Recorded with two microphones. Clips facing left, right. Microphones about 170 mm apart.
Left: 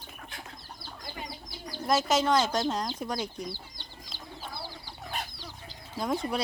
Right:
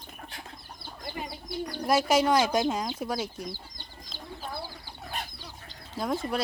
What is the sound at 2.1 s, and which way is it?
Speech, 10° right (ahead or behind).